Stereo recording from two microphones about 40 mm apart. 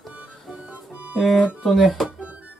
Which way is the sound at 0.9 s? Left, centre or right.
Right.